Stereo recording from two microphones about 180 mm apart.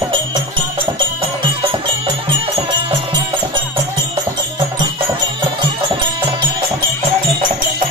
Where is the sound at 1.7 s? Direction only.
30° right (ahead or behind).